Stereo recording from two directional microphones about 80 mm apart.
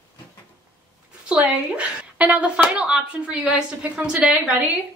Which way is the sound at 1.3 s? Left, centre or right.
Centre.